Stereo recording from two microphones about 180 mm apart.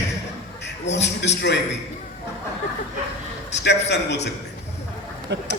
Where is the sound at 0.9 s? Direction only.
75° left (ahead or behind).